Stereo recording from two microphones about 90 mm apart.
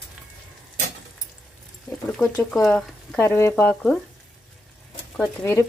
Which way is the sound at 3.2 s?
30° left (ahead or behind).